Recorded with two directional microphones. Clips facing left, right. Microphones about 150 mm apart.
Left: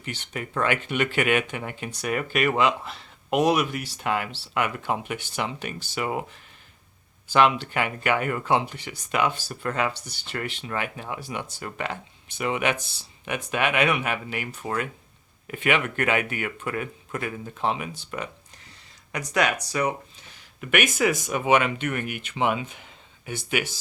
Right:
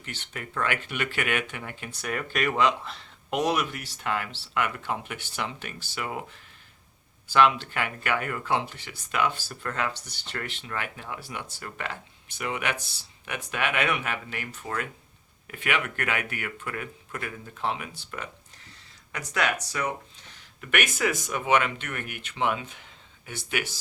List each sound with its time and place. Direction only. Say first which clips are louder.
0.0 s speech: left 5 dB; 15° left (ahead or behind)
7.3 s speech: left 1 dB; 20° left (ahead or behind)
20.6 s speech: left 4 dB; 15° left (ahead or behind)